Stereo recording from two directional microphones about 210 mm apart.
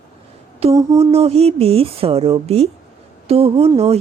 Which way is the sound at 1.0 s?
30° right (ahead or behind).